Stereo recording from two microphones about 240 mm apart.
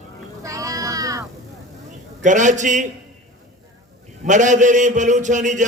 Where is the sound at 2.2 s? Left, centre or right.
Right.